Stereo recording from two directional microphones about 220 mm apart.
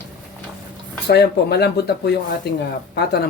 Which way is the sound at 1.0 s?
50° left (ahead or behind).